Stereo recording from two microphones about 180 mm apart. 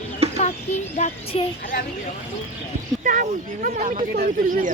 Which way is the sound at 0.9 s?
40° left (ahead or behind).